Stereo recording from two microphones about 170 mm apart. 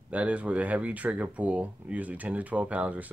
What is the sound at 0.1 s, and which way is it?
Speech, 10° right (ahead or behind).